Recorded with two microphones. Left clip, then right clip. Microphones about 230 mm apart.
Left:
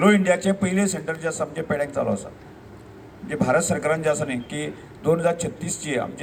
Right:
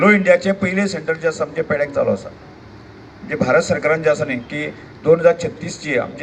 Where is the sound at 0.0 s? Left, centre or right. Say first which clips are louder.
Right 6 dB; left.